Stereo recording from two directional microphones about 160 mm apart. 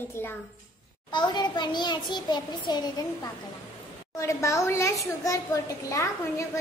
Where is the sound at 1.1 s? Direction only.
25° left (ahead or behind).